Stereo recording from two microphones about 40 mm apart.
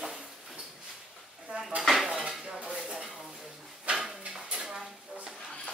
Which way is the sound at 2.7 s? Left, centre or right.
Centre.